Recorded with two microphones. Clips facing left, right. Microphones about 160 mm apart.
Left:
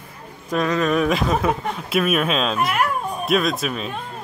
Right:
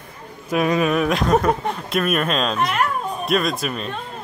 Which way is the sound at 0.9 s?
Centre (ahead or behind).